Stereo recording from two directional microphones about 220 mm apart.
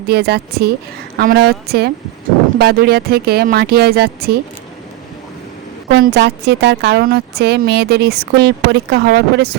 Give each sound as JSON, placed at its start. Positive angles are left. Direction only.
{"t": 0.1, "sound": "speech", "side_deg": -45}
{"t": 5.9, "sound": "speech", "side_deg": -50}